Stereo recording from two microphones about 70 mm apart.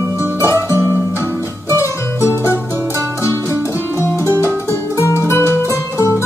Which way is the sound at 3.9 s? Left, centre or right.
Left.